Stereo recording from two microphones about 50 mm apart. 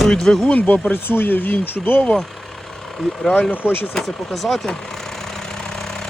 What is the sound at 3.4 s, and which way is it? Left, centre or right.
Speech, left.